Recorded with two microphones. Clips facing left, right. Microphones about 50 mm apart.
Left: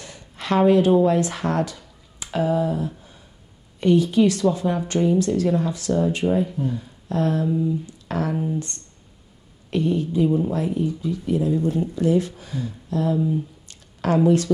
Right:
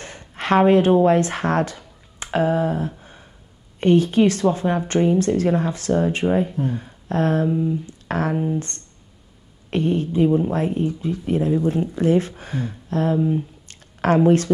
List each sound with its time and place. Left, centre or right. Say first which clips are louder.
0.0 s speech: right 5 dB; right
3.0 s gasp: right 3 dB; right
3.8 s a woman's voice: right 1 dB; right